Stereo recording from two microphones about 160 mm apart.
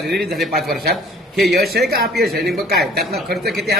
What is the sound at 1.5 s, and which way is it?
Speech, 75° right (ahead or behind).